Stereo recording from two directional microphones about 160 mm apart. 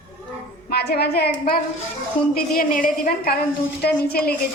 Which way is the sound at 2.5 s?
60° left (ahead or behind).